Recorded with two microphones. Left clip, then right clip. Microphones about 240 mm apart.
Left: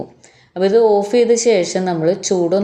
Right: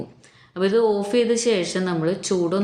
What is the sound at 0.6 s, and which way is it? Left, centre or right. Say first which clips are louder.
A woman's voice: left 7 dB; centre.